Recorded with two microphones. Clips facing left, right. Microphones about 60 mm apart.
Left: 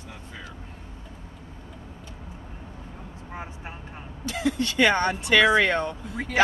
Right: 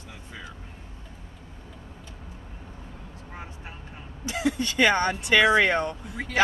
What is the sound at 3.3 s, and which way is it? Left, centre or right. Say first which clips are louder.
Vehicle: left 4 dB; centre.